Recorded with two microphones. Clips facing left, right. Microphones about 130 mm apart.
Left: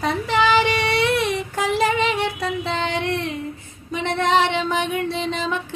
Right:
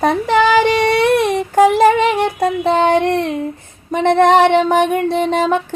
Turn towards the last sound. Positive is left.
turn(degrees=-55)  # may be behind; listen again after turning